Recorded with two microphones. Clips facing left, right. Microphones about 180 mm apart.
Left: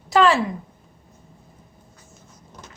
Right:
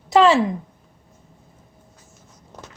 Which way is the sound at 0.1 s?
25° right (ahead or behind).